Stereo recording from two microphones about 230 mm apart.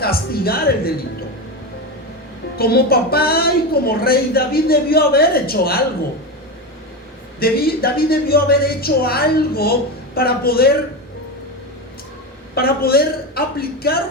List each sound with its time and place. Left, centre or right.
0.0 s speech: left
2.6 s a woman's voice: left
7.3 s a woman's voice: left
12.5 s speech: left